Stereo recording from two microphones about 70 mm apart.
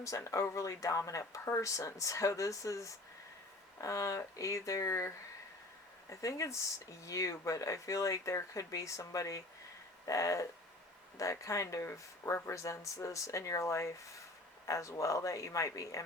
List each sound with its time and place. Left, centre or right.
0.0 s speech: left